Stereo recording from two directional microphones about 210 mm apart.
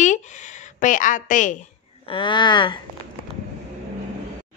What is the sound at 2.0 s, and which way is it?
Speech, 25° left (ahead or behind).